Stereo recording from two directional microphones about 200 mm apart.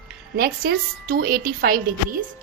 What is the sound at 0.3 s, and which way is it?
A woman's voice, 45° right (ahead or behind).